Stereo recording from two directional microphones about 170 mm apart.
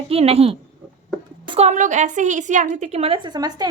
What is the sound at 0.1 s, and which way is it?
A woman's voice, 35° right (ahead or behind).